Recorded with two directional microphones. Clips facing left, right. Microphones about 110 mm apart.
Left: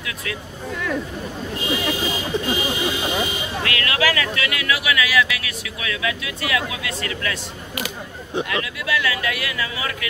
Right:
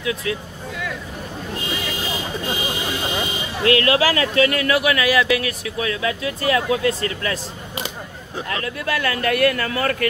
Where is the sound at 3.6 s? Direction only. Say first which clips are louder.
Right 7 dB; 30° right (ahead or behind).